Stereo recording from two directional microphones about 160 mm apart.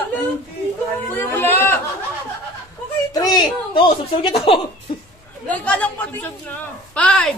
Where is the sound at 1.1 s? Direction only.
15° left (ahead or behind).